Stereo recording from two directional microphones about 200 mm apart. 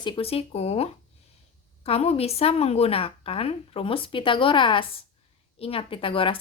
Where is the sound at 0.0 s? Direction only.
30° left (ahead or behind).